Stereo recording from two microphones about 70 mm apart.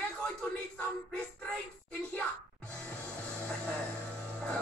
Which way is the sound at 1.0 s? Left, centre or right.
Centre.